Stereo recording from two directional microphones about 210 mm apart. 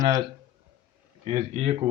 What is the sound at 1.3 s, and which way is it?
Speech, 30° right (ahead or behind).